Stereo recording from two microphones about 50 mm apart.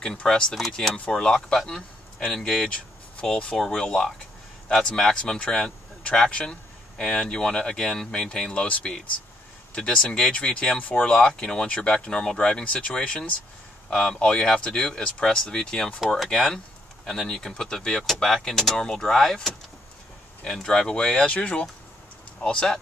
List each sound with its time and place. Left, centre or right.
0.0 s speech: centre
2.7 s speech: left
5.1 s speech: left
9.8 s speech: centre
20.6 s speech: centre